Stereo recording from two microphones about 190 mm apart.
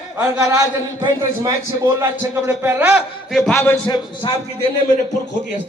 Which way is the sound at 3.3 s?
5° left (ahead or behind).